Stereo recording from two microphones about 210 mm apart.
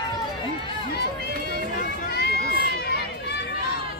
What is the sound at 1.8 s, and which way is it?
Run, 50° left (ahead or behind).